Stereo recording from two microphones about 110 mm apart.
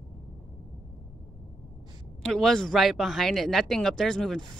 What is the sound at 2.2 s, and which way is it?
Speech, 5° left (ahead or behind).